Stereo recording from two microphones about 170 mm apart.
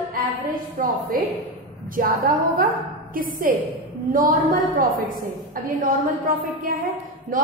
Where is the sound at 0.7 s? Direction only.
55° right (ahead or behind).